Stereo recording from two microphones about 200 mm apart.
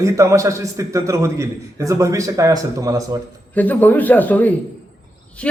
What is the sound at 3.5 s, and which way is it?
A man's voice, 10° left (ahead or behind).